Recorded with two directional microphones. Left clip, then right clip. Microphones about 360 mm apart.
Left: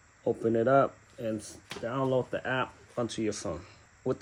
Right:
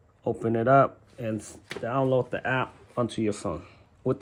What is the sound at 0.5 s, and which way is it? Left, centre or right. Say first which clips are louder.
Speech: right 5 dB; centre.